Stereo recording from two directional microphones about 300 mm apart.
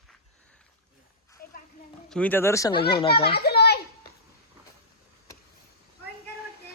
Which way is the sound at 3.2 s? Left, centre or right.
Left.